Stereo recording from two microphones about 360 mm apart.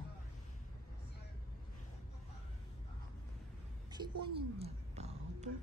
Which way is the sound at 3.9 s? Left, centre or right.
Centre.